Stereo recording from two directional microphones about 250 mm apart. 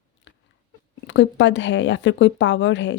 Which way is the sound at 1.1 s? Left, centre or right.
Left.